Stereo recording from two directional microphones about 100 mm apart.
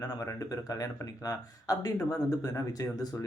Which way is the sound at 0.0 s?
35° left (ahead or behind).